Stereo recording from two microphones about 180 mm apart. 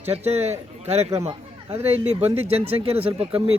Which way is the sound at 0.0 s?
35° right (ahead or behind).